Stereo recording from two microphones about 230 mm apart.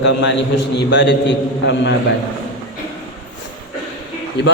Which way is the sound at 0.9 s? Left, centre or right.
Left.